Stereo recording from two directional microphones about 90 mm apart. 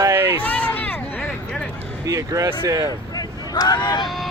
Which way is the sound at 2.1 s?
40° right (ahead or behind).